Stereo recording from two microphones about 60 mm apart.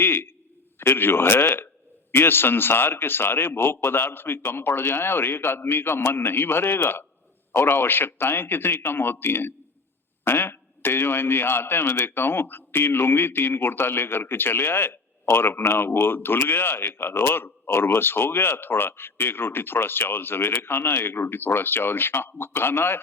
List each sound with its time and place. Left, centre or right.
0.0 s a man's voice: left